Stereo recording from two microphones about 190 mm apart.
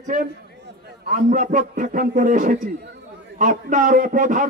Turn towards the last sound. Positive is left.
turn(degrees=-45)  # may be behind; listen again after turning